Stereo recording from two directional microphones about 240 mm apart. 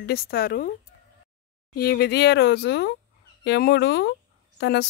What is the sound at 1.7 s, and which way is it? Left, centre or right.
Speech, left.